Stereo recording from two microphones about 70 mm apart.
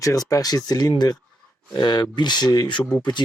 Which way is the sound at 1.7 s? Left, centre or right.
Left.